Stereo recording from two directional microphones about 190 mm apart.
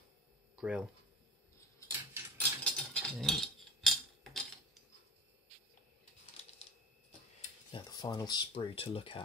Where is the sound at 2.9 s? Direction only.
5° left (ahead or behind).